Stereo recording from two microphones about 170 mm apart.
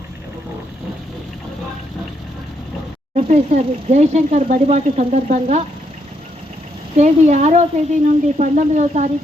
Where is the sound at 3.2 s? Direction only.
45° right (ahead or behind).